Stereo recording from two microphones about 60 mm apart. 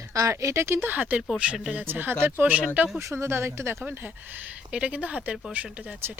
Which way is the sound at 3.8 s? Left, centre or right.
Right.